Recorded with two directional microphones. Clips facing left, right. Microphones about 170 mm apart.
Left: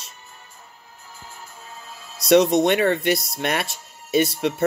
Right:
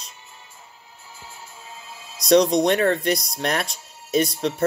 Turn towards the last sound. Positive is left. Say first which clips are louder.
# left 1 dB
turn(degrees=5)  # may be behind; listen again after turning